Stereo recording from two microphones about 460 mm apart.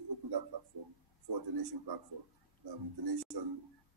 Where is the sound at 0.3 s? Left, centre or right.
Right.